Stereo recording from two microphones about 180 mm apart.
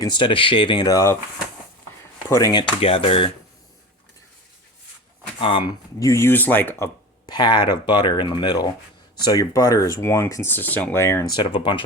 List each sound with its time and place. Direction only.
0.0 s speech: 25° left (ahead or behind)
2.3 s speech: 20° left (ahead or behind)
5.4 s speech: 30° left (ahead or behind)
6.0 s speech: 15° left (ahead or behind)
7.3 s speech: 25° left (ahead or behind)
11.3 s speech: 25° left (ahead or behind)